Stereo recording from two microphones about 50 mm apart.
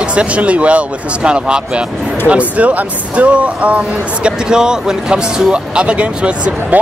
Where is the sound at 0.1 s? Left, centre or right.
Right.